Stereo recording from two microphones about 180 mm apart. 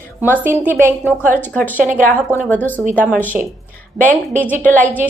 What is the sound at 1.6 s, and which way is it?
Speech, 45° right (ahead or behind).